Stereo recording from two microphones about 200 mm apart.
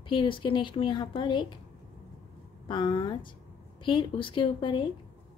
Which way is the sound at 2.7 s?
25° left (ahead or behind).